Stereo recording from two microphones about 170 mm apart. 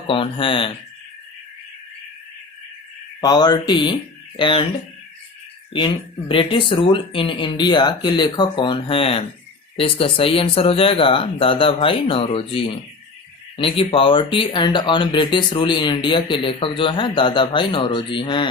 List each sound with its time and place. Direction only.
0.1 s speech: 30° left (ahead or behind)
3.2 s speech: 25° left (ahead or behind)
5.7 s speech: 30° left (ahead or behind)